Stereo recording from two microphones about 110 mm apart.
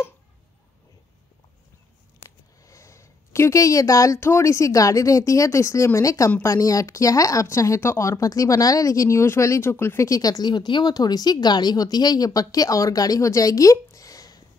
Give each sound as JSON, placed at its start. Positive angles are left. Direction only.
{"t": 2.1, "sound": "speech", "side_deg": 30}